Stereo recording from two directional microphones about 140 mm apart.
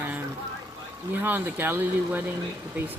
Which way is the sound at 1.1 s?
15° right (ahead or behind).